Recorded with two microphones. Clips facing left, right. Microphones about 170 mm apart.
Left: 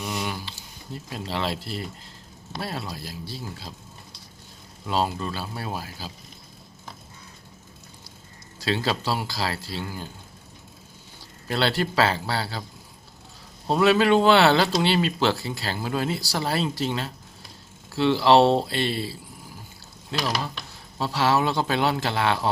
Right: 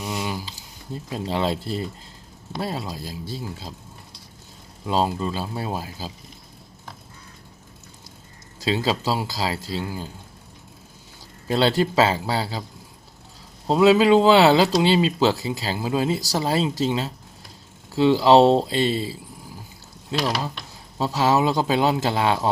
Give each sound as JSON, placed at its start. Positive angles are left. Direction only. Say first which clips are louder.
{"t": 0.0, "sound": "a sound", "louder": "right 2 dB", "side_deg": -20}
{"t": 1.1, "sound": "speech", "louder": "right 5 dB", "side_deg": -20}
{"t": 4.9, "sound": "speech", "louder": "right 3 dB", "side_deg": -20}
{"t": 8.6, "sound": "speech", "louder": "right 3 dB", "side_deg": -15}
{"t": 11.4, "sound": "speech", "louder": "right 5 dB", "side_deg": -20}
{"t": 13.7, "sound": "speech", "louder": "right 4 dB", "side_deg": -15}
{"t": 20.1, "sound": "speech", "louder": "right 3 dB", "side_deg": -20}